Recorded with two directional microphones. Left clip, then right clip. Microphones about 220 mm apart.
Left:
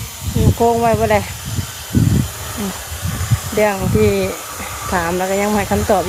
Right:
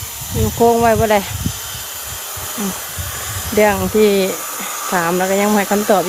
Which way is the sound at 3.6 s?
15° right (ahead or behind).